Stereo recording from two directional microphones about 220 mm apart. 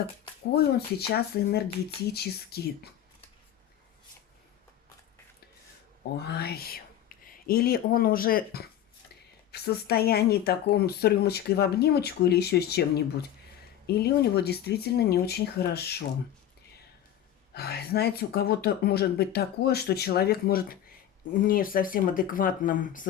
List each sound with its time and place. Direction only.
0.5 s speech: 45° left (ahead or behind)
6.2 s speech: 45° left (ahead or behind)
13.8 s speech: 45° left (ahead or behind)
17.5 s speech: 45° left (ahead or behind)